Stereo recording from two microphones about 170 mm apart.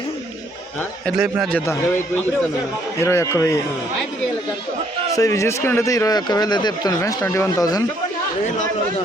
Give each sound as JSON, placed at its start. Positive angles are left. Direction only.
{"t": 1.0, "sound": "a man's voice", "side_deg": 0}
{"t": 3.0, "sound": "a man's voice", "side_deg": 15}
{"t": 5.1, "sound": "a man's voice", "side_deg": 20}